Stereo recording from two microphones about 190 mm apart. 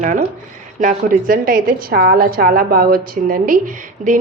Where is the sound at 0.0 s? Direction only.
45° right (ahead or behind).